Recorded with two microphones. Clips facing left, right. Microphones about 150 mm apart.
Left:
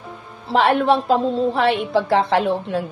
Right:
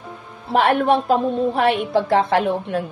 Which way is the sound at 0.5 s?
50° right (ahead or behind).